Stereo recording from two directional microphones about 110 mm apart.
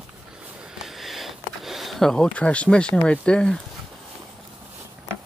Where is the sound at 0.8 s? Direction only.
Centre (ahead or behind).